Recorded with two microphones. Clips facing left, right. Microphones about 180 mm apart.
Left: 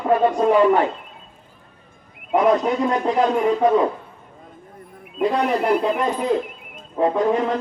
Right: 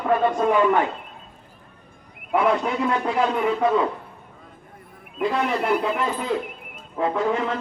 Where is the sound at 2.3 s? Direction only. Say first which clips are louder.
Left 4 dB; 40° left (ahead or behind).